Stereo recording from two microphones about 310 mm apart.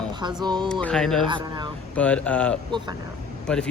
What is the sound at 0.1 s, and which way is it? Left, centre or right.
Speech, centre.